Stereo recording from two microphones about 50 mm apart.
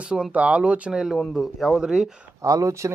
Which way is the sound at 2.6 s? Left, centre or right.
Right.